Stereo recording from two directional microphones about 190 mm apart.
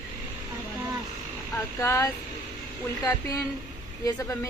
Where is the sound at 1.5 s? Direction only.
15° left (ahead or behind).